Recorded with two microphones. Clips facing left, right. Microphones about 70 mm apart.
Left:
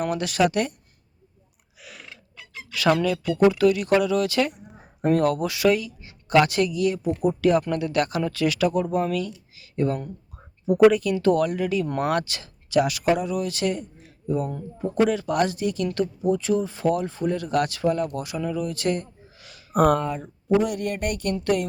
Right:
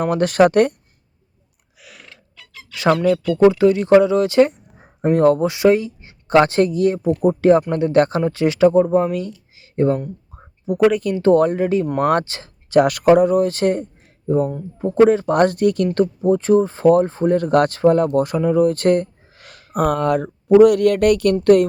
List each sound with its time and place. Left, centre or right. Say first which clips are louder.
0.0 s speech: right 8 dB; right
1.8 s a sound: even; centre
2.3 s a sound: left 3 dB; centre
3.3 s speech: right 4 dB; right
9.6 s a sound: right 7 dB; right
10.7 s speech: even; centre
11.0 s speech: right 6 dB; right
12.8 s a man's voice: right 11 dB; right
16.0 s speech: right 7 dB; right
19.7 s speech: right 1 dB; centre
20.1 s speech: right 9 dB; right
21.3 s speech: right 10 dB; right